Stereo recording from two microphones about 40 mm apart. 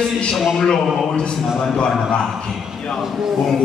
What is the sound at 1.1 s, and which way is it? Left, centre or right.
Speech, left.